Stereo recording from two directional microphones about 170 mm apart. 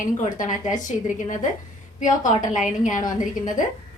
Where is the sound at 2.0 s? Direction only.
50° left (ahead or behind).